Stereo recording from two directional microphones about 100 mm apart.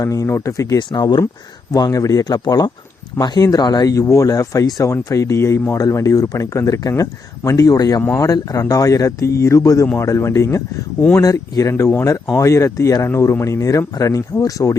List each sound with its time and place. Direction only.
0.0 s speech: 35° left (ahead or behind)
0.8 s speech: 45° left (ahead or behind)
1.7 s speech: 35° left (ahead or behind)
5.7 s speech: 35° left (ahead or behind)